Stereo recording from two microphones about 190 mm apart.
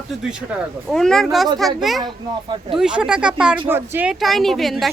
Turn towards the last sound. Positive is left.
turn(degrees=0)  # may be behind; listen again after turning